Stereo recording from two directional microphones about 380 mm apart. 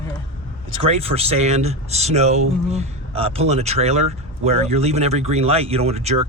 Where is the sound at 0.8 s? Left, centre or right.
Centre.